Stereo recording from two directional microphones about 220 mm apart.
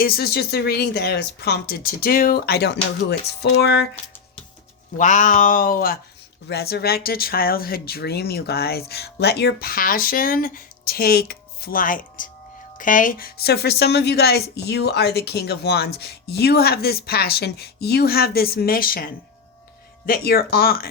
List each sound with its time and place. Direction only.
0.0 s a woman's voice: 45° left (ahead or behind)
4.9 s a woman's voice: 35° left (ahead or behind)